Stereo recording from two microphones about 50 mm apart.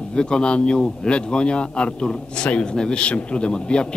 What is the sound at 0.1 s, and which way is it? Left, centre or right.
A man's voice, centre.